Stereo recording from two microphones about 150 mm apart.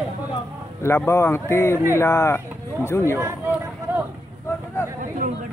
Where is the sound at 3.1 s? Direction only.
15° right (ahead or behind).